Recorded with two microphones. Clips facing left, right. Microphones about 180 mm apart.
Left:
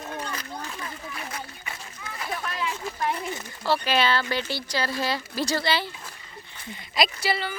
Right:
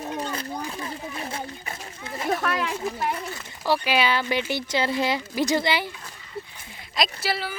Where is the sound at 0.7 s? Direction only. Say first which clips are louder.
Right 4 dB; 30° right (ahead or behind).